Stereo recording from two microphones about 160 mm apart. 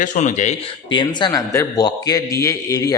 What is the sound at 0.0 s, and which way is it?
Speech, 50° left (ahead or behind).